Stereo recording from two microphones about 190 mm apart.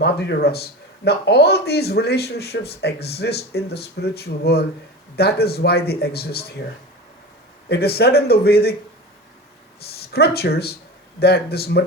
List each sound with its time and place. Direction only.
0.0 s a man's voice: 55° left (ahead or behind)
7.7 s a man's voice: 55° left (ahead or behind)
9.8 s a man's voice: 55° left (ahead or behind)